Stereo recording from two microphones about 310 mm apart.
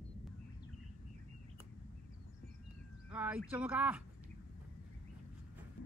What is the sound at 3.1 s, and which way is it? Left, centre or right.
Speech, centre.